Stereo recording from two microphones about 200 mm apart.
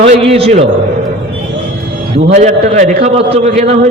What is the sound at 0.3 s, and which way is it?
Speech, 30° right (ahead or behind).